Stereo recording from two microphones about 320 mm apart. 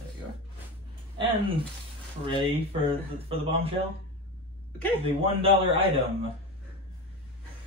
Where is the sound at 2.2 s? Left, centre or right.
Centre.